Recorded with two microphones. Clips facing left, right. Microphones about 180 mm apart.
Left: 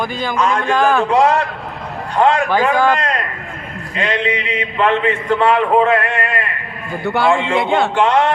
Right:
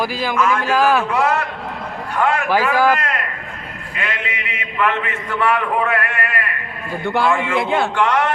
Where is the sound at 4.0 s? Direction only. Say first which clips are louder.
Left 8 dB; 35° left (ahead or behind).